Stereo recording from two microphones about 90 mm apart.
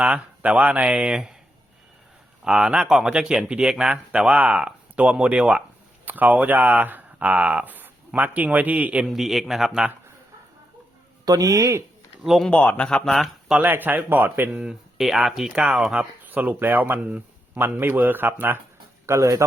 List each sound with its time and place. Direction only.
0.0 s speech: 15° right (ahead or behind)
2.4 s speech: 10° right (ahead or behind)
9.0 s speech: 5° right (ahead or behind)
11.3 s speech: 40° right (ahead or behind)
12.2 s speech: centre (ahead or behind)
12.5 s speech: 15° left (ahead or behind)
13.6 s speech: 20° right (ahead or behind)
14.6 s speech: 5° right (ahead or behind); by 18.6 s 20° right (ahead or behind)
19.0 s speech: 35° right (ahead or behind)